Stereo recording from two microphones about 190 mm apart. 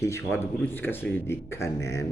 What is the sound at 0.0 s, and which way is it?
A man's voice, 15° left (ahead or behind).